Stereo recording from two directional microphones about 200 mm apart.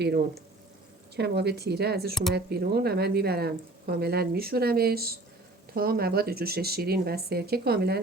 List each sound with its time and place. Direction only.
1.1 s speech: 55° right (ahead or behind)